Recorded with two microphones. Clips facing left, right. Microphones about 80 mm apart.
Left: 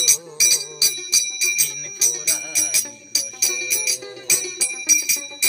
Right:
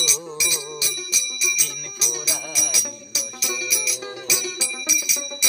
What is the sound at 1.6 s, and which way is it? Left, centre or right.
Music, right.